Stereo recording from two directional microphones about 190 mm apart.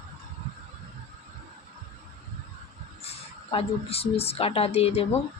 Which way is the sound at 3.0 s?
30° left (ahead or behind).